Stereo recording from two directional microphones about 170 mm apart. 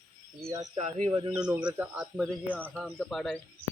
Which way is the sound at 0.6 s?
40° right (ahead or behind).